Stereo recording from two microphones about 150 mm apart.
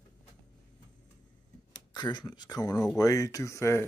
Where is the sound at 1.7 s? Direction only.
30° left (ahead or behind).